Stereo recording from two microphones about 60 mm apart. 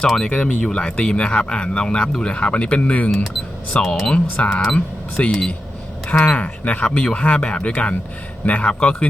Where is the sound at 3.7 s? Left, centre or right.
Centre.